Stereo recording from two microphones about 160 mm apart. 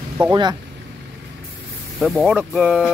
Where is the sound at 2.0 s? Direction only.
Centre (ahead or behind).